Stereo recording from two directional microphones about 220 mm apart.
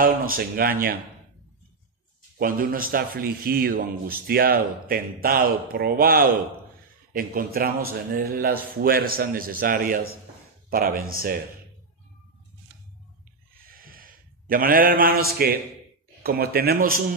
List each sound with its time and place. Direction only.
0.0 s speech: 40° right (ahead or behind)
2.3 s speech: 40° right (ahead or behind)
13.7 s a sound: 40° right (ahead or behind)
15.4 s a man's voice: 45° right (ahead or behind)